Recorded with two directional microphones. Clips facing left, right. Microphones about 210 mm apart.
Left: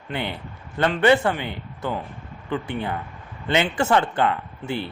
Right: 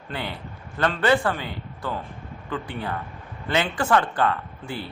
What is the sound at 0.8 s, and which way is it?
A man's voice, 25° left (ahead or behind).